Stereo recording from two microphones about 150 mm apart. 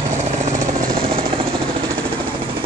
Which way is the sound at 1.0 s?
40° right (ahead or behind).